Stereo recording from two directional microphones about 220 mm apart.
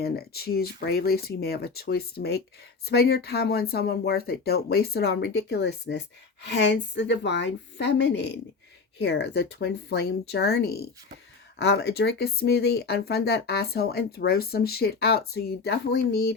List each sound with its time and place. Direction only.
0.0 s speech: 45° left (ahead or behind)